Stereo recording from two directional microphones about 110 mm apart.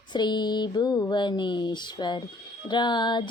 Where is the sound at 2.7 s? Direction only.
45° left (ahead or behind).